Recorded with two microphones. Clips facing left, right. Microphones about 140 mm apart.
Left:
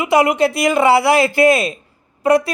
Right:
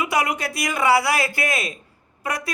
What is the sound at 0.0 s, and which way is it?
Speech, 25° left (ahead or behind).